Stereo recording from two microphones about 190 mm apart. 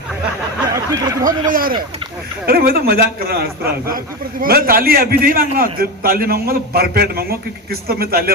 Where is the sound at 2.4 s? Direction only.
50° right (ahead or behind).